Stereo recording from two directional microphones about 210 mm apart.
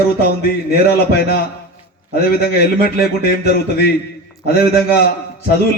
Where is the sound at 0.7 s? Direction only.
50° left (ahead or behind).